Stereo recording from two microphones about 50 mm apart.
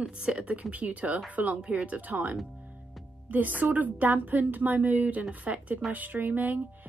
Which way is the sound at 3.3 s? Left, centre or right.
Right.